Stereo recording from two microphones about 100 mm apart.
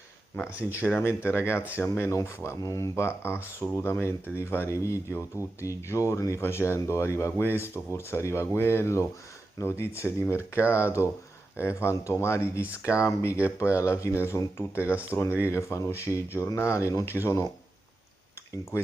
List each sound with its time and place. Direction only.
0.8 s speech: 20° left (ahead or behind)